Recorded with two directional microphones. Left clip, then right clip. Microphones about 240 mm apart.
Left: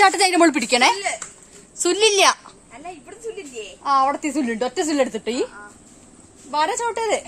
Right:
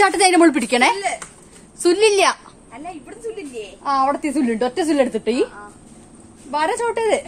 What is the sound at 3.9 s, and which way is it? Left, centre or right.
A woman's voice, left.